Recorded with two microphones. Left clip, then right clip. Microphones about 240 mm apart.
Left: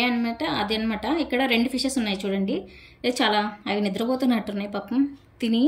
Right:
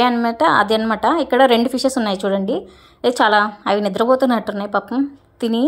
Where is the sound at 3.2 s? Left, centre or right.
Centre.